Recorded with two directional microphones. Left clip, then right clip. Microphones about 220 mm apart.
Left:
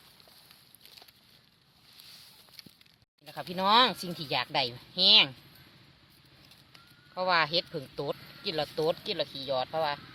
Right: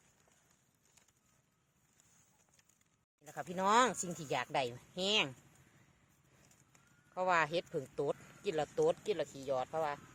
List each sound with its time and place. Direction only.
3.2 s speech: 35° right (ahead or behind)
7.1 s speech: 35° right (ahead or behind)